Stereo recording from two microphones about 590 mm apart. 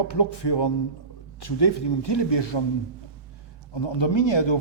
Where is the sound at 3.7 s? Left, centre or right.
Left.